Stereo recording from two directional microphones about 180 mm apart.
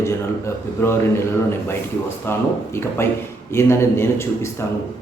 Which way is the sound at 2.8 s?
15° left (ahead or behind).